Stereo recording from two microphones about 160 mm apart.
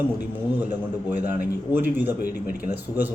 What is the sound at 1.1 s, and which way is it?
Speech, 10° right (ahead or behind).